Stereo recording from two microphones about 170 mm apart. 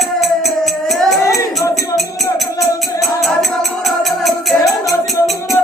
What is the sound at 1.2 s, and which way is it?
Music, 20° left (ahead or behind).